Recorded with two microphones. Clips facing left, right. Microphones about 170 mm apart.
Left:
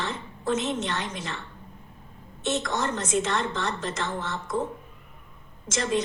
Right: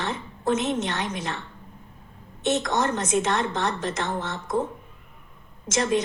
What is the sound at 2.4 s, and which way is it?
A woman's voice, 60° right (ahead or behind).